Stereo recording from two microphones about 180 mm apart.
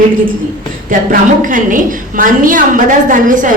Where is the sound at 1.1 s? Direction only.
50° right (ahead or behind).